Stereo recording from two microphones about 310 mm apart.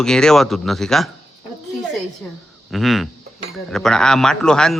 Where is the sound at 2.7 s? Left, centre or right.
Centre.